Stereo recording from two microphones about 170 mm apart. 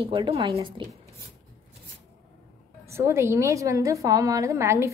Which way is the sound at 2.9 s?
15° right (ahead or behind).